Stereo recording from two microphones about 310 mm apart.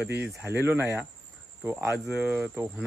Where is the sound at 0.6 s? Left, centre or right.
Centre.